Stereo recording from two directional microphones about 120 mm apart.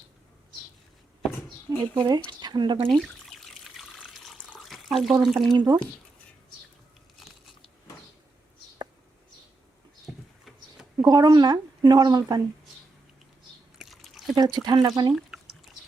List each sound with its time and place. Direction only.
2.0 s speech: 35° right (ahead or behind)
2.9 s speech: centre (ahead or behind)
4.3 s water: centre (ahead or behind)
5.2 s speech: centre (ahead or behind)
5.5 s speech: 35° right (ahead or behind)
10.4 s a sound: 5° right (ahead or behind)
11.0 s speech: 35° right (ahead or behind)
13.7 s a sound: centre (ahead or behind)
14.3 s speech: 35° right (ahead or behind)
15.1 s drip: centre (ahead or behind)